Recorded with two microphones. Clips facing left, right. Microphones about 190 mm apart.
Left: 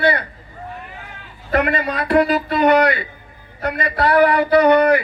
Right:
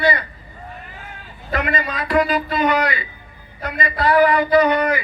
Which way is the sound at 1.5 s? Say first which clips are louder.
Left 4 dB; 60° left (ahead or behind).